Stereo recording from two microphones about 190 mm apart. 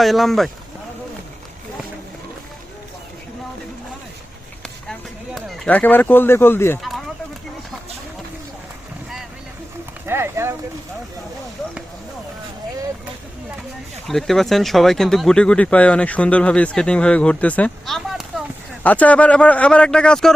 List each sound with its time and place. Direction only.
0.0 s speech: centre (ahead or behind)
4.6 s a sound: centre (ahead or behind)
10.1 s speech: 15° right (ahead or behind)
14.1 s speech: centre (ahead or behind)